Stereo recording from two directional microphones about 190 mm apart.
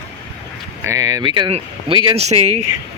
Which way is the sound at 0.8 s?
15° right (ahead or behind).